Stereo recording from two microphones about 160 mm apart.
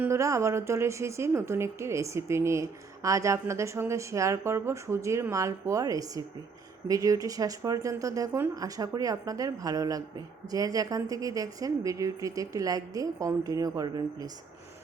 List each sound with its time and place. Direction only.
0.0 s a woman's voice: 20° right (ahead or behind)